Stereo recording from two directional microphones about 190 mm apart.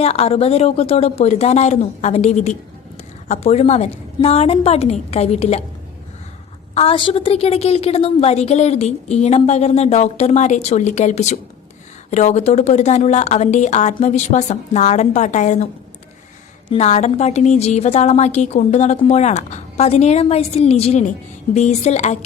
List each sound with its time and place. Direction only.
0.0 s a woman's voice: 30° left (ahead or behind)
6.7 s a woman's voice: 30° left (ahead or behind)
16.7 s a woman's voice: 35° left (ahead or behind)